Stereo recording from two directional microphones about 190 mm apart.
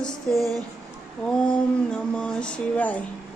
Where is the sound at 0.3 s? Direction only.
20° right (ahead or behind).